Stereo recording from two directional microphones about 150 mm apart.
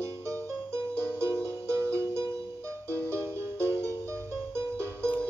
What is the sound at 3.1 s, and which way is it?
Music, 20° right (ahead or behind).